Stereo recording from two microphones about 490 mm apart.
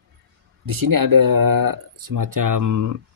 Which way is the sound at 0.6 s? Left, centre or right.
Right.